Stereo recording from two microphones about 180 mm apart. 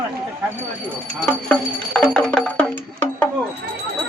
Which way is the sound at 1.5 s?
5° left (ahead or behind).